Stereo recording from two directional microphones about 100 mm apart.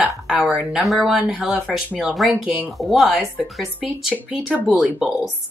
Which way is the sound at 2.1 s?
Centre (ahead or behind).